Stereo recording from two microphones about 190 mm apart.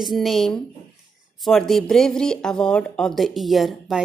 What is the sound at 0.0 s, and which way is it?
Speech, centre (ahead or behind).